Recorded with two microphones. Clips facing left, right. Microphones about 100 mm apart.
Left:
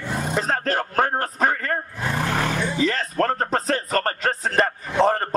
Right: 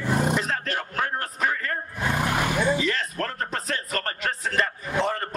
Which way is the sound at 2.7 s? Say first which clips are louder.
Left 5 dB; 40° left (ahead or behind).